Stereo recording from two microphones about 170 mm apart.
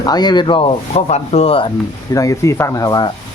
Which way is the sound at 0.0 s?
25° left (ahead or behind).